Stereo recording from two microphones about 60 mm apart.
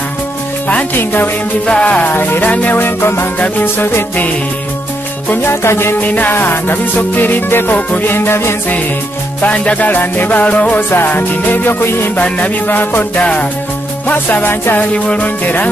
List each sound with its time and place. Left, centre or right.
0.9 s music: left
1.7 s music: left
2.1 s music: left
3.0 s music: left
5.3 s music: left
5.9 s music: left
9.4 s music: left
15.0 s music: left